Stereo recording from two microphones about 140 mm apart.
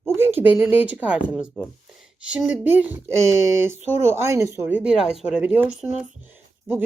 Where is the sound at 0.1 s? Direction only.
15° right (ahead or behind).